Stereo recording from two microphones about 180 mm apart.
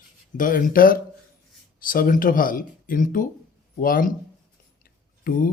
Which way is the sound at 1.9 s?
50° left (ahead or behind).